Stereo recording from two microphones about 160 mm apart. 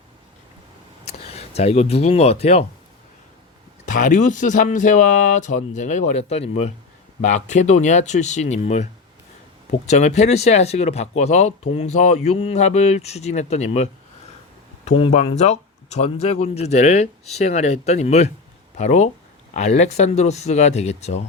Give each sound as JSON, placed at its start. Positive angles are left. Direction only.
{"t": 1.3, "sound": "speech", "side_deg": 40}
{"t": 3.8, "sound": "speech", "side_deg": 55}